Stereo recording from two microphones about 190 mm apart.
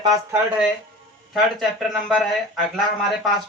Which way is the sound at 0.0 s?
15° right (ahead or behind).